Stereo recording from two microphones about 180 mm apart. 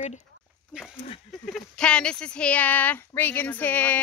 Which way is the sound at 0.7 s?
5° right (ahead or behind).